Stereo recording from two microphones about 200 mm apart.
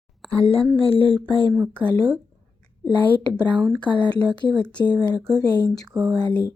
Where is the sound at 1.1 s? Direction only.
20° right (ahead or behind).